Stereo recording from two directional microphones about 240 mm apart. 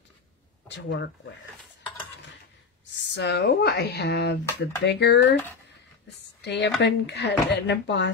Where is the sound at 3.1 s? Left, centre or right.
Left.